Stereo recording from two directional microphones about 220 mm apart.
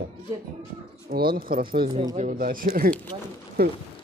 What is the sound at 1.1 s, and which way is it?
Speech, 45° right (ahead or behind).